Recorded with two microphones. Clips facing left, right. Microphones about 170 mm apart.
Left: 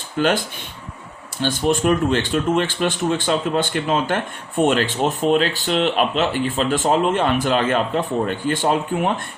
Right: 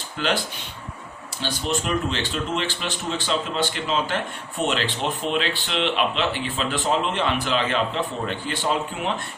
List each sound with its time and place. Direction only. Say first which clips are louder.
1.4 s speech: left 7 dB; 50° left (ahead or behind)